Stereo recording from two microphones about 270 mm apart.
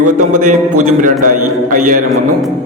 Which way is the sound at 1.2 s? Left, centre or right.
Right.